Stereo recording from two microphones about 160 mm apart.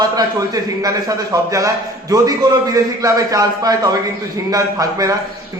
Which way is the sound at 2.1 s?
25° right (ahead or behind).